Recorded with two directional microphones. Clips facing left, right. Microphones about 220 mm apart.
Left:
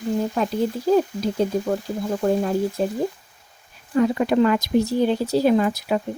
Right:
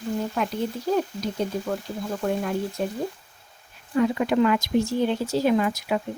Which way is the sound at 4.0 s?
40° left (ahead or behind).